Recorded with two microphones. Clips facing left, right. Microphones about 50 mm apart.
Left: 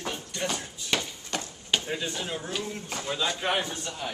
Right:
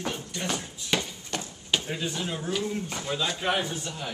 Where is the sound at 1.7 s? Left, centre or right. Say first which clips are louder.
Even; centre.